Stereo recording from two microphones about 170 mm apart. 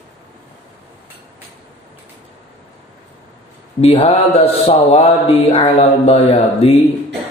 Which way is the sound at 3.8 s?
35° left (ahead or behind).